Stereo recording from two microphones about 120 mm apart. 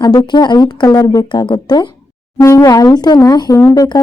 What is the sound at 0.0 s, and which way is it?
Speech, 35° left (ahead or behind).